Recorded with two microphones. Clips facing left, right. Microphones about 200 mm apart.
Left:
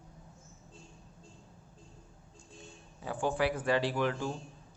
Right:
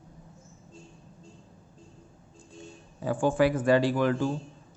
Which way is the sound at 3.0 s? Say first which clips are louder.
Right 7 dB; 45° right (ahead or behind).